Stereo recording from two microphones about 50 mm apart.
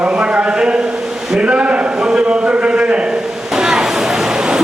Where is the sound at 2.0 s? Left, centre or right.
Centre.